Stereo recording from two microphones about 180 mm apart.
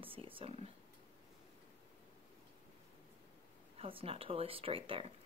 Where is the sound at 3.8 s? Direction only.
30° right (ahead or behind).